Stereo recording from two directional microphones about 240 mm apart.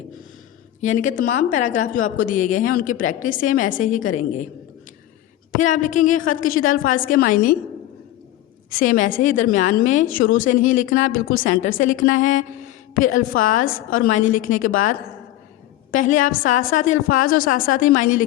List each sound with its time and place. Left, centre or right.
0.8 s a woman's voice: left
5.5 s a woman's voice: left
8.7 s a woman's voice: left